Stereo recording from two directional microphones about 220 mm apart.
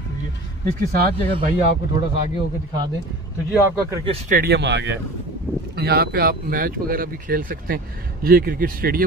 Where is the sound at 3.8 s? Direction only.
15° right (ahead or behind).